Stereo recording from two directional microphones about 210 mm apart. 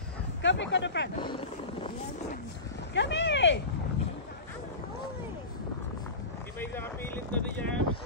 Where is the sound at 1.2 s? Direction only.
25° left (ahead or behind).